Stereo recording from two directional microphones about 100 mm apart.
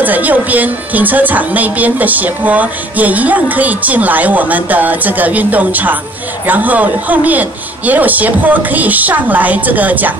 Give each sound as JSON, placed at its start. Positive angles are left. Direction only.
{"t": 0.0, "sound": "speech", "side_deg": -15}